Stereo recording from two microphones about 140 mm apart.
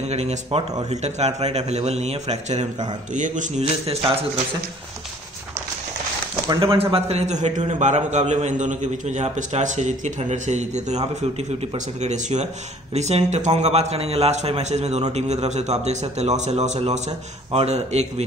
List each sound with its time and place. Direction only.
0.0 s a man's voice: 50° right (ahead or behind)
3.1 s a man's voice: 65° right (ahead or behind); by 4.2 s 45° right (ahead or behind)
6.6 s a man's voice: 40° right (ahead or behind)